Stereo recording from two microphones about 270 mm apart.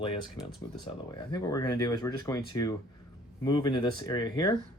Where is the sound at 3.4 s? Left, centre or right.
Centre.